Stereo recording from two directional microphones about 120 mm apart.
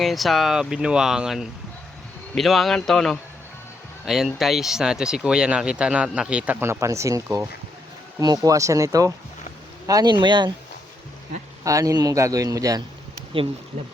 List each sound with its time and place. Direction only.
0.0 s a man's voice: centre (ahead or behind); by 10.5 s 40° right (ahead or behind)
11.6 s a man's voice: 25° right (ahead or behind)
13.3 s speech: 45° right (ahead or behind)